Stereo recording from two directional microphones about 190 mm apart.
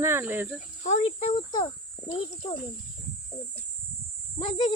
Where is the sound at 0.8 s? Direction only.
40° left (ahead or behind).